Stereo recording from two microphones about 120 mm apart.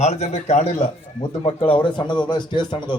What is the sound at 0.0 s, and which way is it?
Speech, 65° left (ahead or behind).